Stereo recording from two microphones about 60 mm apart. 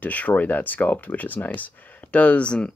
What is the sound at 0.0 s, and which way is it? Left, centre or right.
Speech, left.